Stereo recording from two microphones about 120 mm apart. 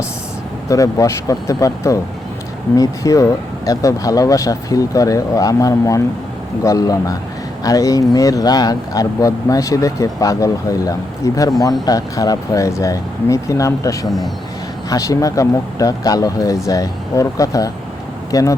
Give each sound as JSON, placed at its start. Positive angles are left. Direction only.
{"t": 0.7, "sound": "speech", "side_deg": 25}